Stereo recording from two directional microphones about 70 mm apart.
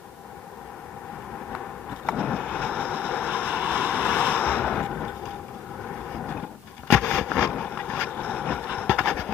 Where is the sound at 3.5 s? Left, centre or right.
Right.